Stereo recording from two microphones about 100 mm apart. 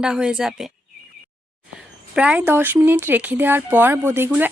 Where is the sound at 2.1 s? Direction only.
10° right (ahead or behind).